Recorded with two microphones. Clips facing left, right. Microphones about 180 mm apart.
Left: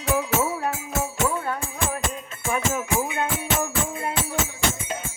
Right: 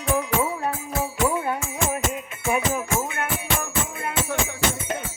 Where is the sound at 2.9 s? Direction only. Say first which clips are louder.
Left 2 dB; 15° left (ahead or behind).